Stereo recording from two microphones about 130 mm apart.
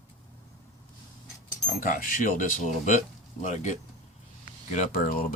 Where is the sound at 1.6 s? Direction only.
90° left; by 3.7 s 65° left (ahead or behind).